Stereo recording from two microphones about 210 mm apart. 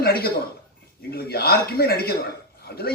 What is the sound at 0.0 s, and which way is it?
A man's voice, 45° left (ahead or behind).